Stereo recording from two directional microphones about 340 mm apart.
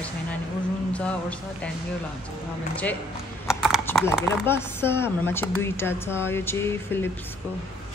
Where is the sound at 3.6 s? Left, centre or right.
Centre.